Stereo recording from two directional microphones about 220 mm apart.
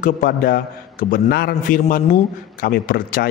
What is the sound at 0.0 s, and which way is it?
Speech, 40° left (ahead or behind).